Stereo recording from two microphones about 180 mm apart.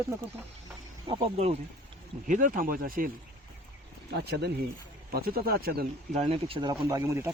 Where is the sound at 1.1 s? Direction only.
30° right (ahead or behind).